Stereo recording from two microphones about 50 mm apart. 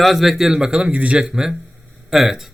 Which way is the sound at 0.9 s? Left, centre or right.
Right.